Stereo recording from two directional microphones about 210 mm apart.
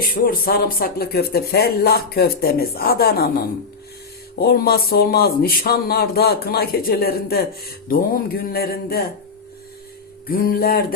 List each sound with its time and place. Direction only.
0.0 s speech: 45° left (ahead or behind)
10.2 s speech: 45° left (ahead or behind)